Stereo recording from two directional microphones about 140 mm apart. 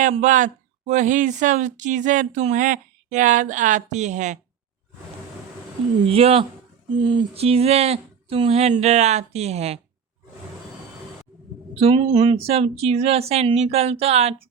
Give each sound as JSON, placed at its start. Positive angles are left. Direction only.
{"t": 0.0, "sound": "speech", "side_deg": -65}
{"t": 6.1, "sound": "speech", "side_deg": -45}
{"t": 7.0, "sound": "a sound", "side_deg": -35}
{"t": 7.3, "sound": "speech", "side_deg": -45}
{"t": 11.7, "sound": "speech", "side_deg": -40}